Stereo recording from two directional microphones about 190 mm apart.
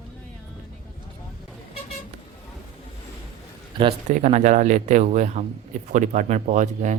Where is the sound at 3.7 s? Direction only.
25° right (ahead or behind).